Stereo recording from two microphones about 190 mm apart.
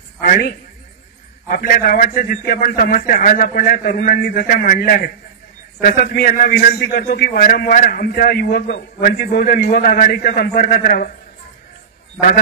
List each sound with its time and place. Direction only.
0.2 s a man's voice: 50° left (ahead or behind)